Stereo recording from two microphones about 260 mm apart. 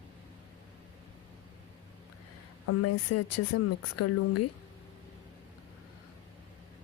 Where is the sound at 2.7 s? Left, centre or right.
Left.